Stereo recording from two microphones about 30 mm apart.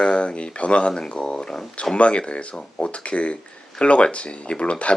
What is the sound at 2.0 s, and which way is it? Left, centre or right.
Speech, left.